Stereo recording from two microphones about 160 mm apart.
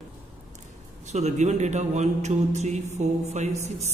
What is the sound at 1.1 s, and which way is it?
A man's voice, 45° right (ahead or behind).